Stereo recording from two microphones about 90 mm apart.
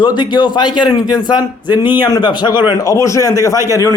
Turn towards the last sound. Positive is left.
turn(degrees=35)  # may be behind; listen again after turning